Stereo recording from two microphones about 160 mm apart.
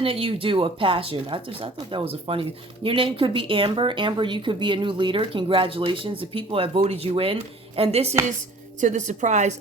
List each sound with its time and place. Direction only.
0.0 s a woman's voice: 35° right (ahead or behind)